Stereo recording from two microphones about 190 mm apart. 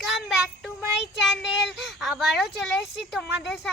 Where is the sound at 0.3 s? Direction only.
5° right (ahead or behind).